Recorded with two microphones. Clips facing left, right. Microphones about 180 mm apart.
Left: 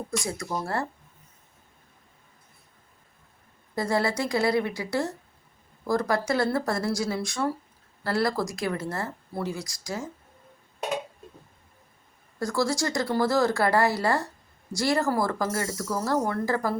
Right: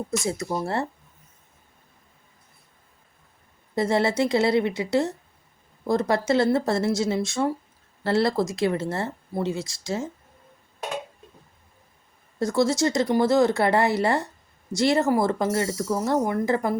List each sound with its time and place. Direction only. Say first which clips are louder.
0.2 s speech: right 4 dB; 25° right (ahead or behind)
3.8 s speech: right 4 dB; 25° right (ahead or behind)
12.4 s speech: right 5 dB; 20° right (ahead or behind)